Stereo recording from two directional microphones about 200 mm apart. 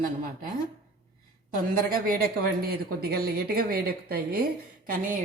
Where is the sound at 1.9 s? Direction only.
50° right (ahead or behind).